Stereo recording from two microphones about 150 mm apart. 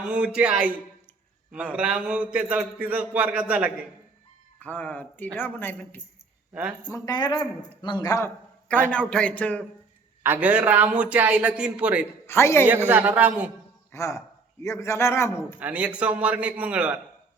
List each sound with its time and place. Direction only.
0.1 s a man's voice: 10° right (ahead or behind)
4.6 s speech: 10° left (ahead or behind)
6.5 s speech: 10° right (ahead or behind)
6.8 s a man's voice: 20° left (ahead or behind)
8.9 s speech: 5° left (ahead or behind)
10.2 s a man's voice: 10° right (ahead or behind)
12.2 s a man's voice: 15° left (ahead or behind)
12.6 s a man's voice: 10° right (ahead or behind)
13.9 s a man's voice: 20° left (ahead or behind)
15.5 s a man's voice: 10° right (ahead or behind)